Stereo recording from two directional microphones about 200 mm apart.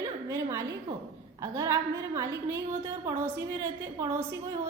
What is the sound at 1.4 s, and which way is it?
A woman's voice, 15° right (ahead or behind).